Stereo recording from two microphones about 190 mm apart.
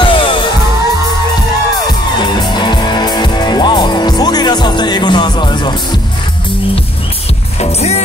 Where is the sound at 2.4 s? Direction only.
25° left (ahead or behind).